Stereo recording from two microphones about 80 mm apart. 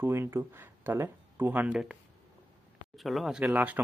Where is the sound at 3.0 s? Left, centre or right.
Centre.